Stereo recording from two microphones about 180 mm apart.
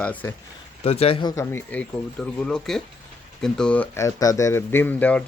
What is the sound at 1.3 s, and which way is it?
Speech, 15° left (ahead or behind).